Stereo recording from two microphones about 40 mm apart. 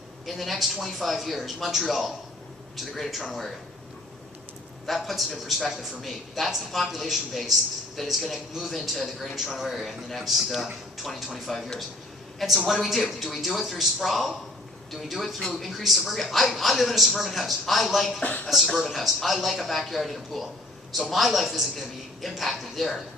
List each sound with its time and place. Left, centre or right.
0.3 s speech: centre
4.9 s speech: centre
18.2 s speech: left
18.4 s speech: centre